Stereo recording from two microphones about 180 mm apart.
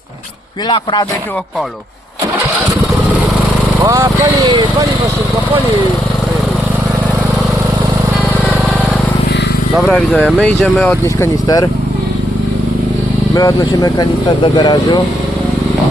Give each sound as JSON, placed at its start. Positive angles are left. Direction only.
{"t": 3.8, "sound": "speech", "side_deg": -20}
{"t": 9.7, "sound": "speech", "side_deg": 0}
{"t": 10.4, "sound": "speech", "side_deg": 5}
{"t": 11.0, "sound": "speech", "side_deg": 15}
{"t": 13.3, "sound": "speech", "side_deg": 20}